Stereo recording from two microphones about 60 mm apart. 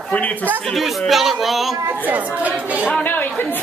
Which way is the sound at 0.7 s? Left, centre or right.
Centre.